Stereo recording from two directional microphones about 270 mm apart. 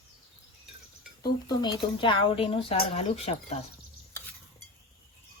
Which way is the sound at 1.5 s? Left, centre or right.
Centre.